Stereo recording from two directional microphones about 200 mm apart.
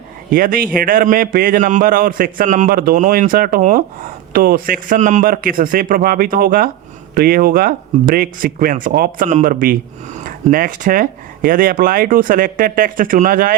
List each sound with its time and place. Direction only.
0.3 s a man's voice: 45° right (ahead or behind)